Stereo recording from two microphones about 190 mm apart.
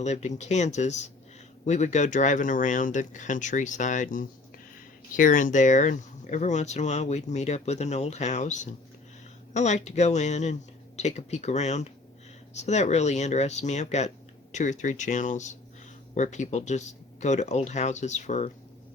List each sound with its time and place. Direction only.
0.0 s speech: 35° left (ahead or behind)